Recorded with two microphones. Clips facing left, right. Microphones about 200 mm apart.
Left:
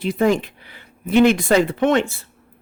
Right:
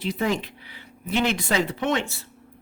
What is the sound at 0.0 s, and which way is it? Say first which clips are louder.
Speech: left 7 dB; 50° left (ahead or behind).